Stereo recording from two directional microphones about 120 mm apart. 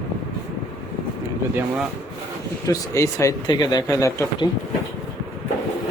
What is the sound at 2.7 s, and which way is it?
Speech, 25° left (ahead or behind).